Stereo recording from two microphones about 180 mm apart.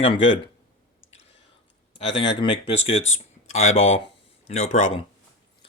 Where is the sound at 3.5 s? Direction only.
35° left (ahead or behind).